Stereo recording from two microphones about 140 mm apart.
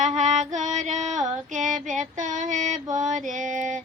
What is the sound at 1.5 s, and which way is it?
Female singing, 65° right (ahead or behind).